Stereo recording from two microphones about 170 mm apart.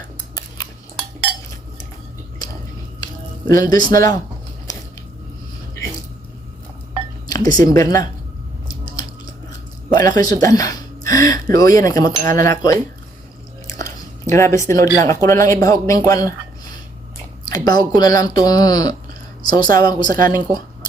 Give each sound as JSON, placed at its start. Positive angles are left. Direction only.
{"t": 3.5, "sound": "speech", "side_deg": 20}
{"t": 7.3, "sound": "a sound", "side_deg": 20}
{"t": 7.6, "sound": "speech", "side_deg": 20}
{"t": 9.9, "sound": "speech", "side_deg": 25}
{"t": 13.8, "sound": "a sound", "side_deg": 15}
{"t": 15.0, "sound": "speech", "side_deg": 15}
{"t": 17.5, "sound": "speech", "side_deg": 25}